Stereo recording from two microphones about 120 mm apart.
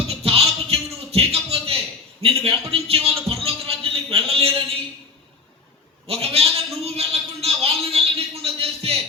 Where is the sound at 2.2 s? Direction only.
55° right (ahead or behind).